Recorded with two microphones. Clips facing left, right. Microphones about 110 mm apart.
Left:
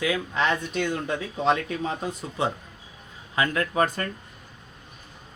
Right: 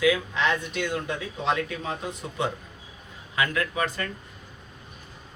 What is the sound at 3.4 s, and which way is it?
Speech, 35° left (ahead or behind).